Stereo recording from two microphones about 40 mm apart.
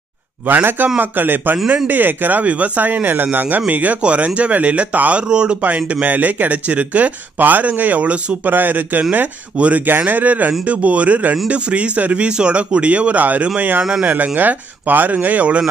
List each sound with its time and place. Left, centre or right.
0.5 s a man's voice: right
2.4 s speech: right
5.3 s speech: right
5.6 s speech: right
8.5 s speech: right
9.6 s speech: right
9.8 s speech: right